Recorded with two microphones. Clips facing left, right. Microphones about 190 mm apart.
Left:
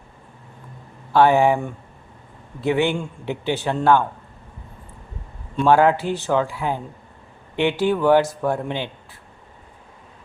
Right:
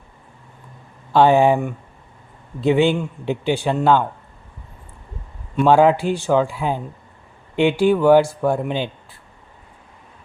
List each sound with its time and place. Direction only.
1.1 s speech: 15° right (ahead or behind)
2.6 s speech: 15° right (ahead or behind)
5.5 s speech: 15° right (ahead or behind)